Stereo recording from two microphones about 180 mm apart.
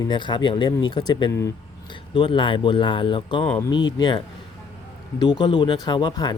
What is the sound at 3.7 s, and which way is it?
Speech, 25° left (ahead or behind).